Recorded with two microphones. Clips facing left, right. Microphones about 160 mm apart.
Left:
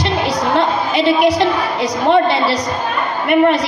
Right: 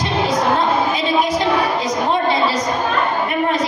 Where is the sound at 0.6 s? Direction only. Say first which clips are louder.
Left 2 dB; 70° left (ahead or behind).